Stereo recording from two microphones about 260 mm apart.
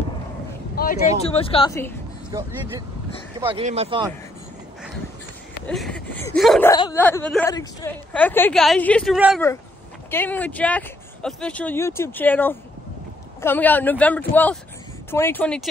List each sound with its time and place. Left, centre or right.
1.2 s speech: left
2.3 s speech: centre
5.7 s a woman's voice: centre
6.7 s a woman's voice: centre